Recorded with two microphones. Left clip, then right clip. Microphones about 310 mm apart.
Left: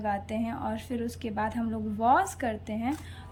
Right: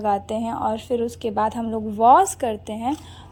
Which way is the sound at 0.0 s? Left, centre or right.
Centre.